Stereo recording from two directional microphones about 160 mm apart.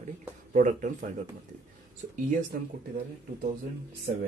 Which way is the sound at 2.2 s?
55° right (ahead or behind).